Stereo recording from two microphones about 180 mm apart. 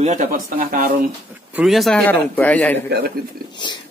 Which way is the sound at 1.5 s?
Centre (ahead or behind).